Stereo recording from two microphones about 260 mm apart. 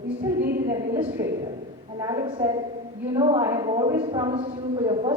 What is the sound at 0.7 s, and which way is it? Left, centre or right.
A woman's voice, centre.